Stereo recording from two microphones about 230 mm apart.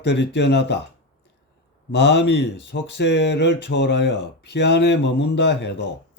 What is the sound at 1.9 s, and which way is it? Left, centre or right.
Speech, left.